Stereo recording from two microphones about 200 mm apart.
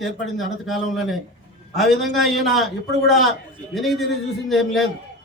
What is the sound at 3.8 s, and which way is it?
A man's voice, centre (ahead or behind).